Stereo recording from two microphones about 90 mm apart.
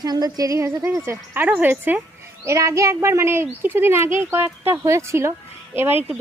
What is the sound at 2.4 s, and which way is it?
Speech, 35° right (ahead or behind).